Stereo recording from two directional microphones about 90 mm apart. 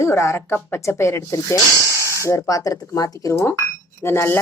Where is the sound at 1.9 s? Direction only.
30° right (ahead or behind).